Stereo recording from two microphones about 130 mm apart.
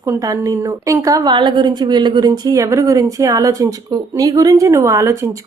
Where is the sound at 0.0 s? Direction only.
25° right (ahead or behind).